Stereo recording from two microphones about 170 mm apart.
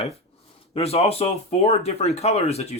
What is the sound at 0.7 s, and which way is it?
Speech, 35° left (ahead or behind).